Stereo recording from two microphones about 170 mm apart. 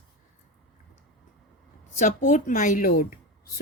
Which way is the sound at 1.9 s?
50° left (ahead or behind).